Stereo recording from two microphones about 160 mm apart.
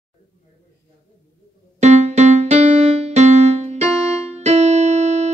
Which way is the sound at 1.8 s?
45° right (ahead or behind).